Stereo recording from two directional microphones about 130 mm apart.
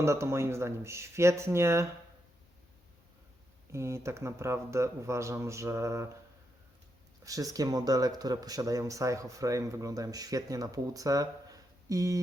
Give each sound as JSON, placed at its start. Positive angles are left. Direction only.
{"t": 0.0, "sound": "speech", "side_deg": -20}
{"t": 3.7, "sound": "speech", "side_deg": -20}
{"t": 7.3, "sound": "speech", "side_deg": -25}